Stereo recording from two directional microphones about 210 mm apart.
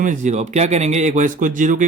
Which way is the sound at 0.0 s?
35° right (ahead or behind).